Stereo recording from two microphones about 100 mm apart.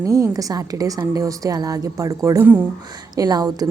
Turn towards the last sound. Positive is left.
turn(degrees=-40)  # may be behind; listen again after turning